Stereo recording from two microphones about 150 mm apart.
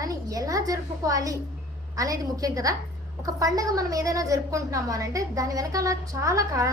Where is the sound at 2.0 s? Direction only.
25° right (ahead or behind).